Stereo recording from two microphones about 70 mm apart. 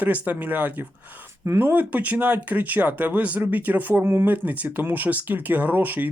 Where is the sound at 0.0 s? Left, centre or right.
Right.